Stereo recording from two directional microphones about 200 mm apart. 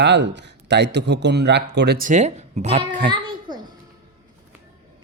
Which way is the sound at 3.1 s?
20° right (ahead or behind).